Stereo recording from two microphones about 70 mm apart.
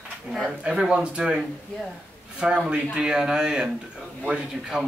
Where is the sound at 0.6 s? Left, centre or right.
Centre.